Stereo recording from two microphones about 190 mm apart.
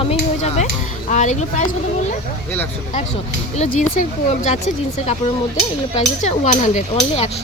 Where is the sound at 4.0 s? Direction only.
35° left (ahead or behind).